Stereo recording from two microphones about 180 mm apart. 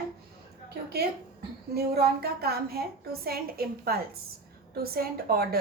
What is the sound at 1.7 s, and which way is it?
A woman's voice, 60° right (ahead or behind).